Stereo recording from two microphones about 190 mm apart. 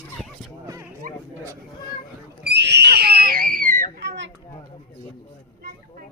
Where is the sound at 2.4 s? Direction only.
60° right (ahead or behind); by 3.8 s 45° right (ahead or behind).